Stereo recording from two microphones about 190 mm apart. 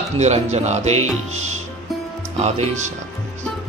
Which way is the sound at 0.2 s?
35° right (ahead or behind).